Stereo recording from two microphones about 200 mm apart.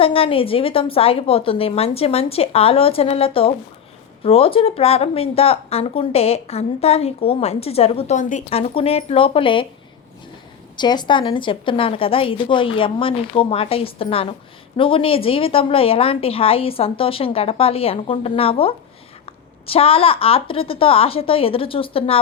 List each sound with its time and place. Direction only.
0.0 s a woman's voice: 30° left (ahead or behind)
10.8 s a woman's voice: 20° left (ahead or behind)